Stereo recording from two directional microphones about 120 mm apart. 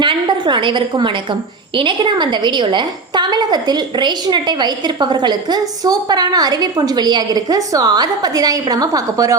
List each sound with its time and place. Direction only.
0.0 s a woman's voice: 40° right (ahead or behind)